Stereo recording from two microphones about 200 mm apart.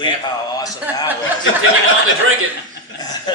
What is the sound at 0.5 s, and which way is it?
Speech, 20° left (ahead or behind).